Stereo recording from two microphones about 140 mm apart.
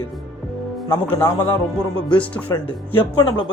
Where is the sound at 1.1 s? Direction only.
20° left (ahead or behind).